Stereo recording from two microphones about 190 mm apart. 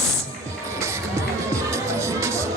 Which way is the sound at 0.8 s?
15° right (ahead or behind).